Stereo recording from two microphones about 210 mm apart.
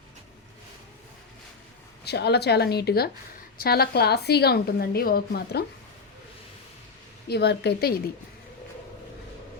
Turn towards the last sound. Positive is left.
turn(degrees=50)  # may be behind; listen again after turning